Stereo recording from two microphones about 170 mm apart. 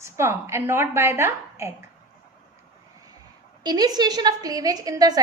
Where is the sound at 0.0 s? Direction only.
15° right (ahead or behind).